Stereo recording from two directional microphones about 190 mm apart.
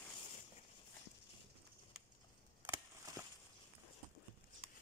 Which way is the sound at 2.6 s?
15° right (ahead or behind).